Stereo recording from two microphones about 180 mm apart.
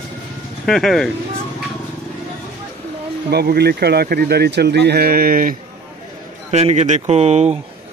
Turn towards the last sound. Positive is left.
turn(degrees=-35)  # may be behind; listen again after turning